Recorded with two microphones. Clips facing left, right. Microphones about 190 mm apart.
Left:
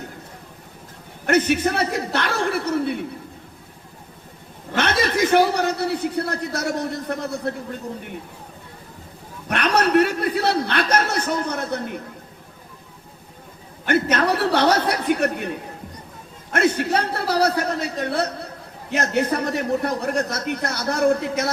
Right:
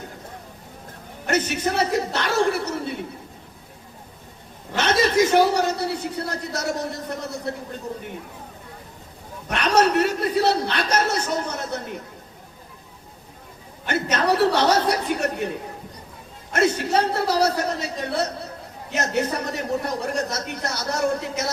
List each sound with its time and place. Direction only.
1.3 s a man's voice: 55° left (ahead or behind)
4.8 s a man's voice: 55° left (ahead or behind)
9.5 s a man's voice: 55° left (ahead or behind)
13.8 s a man's voice: 55° left (ahead or behind)